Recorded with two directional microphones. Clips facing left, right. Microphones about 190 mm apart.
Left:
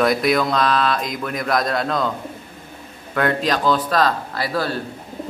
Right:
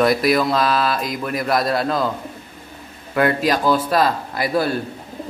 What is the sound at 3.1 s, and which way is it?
Speech, 5° right (ahead or behind).